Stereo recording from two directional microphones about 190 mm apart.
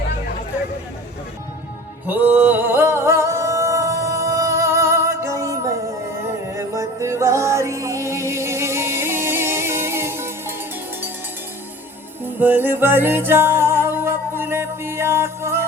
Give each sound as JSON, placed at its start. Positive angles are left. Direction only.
{"t": 2.0, "sound": "music", "side_deg": -10}
{"t": 12.2, "sound": "music", "side_deg": -10}